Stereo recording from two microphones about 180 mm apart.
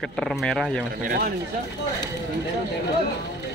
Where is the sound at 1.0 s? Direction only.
50° right (ahead or behind).